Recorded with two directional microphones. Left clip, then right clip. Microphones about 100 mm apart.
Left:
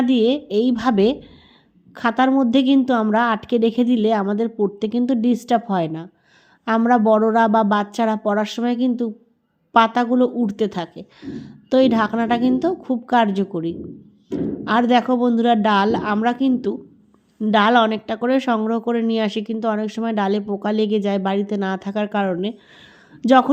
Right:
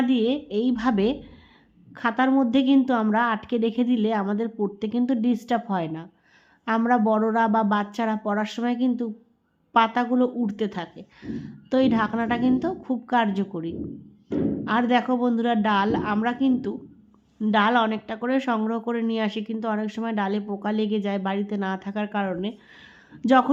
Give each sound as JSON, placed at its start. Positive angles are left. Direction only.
{"t": 0.0, "sound": "a woman's voice", "side_deg": 40}
{"t": 17.5, "sound": "a woman's voice", "side_deg": 45}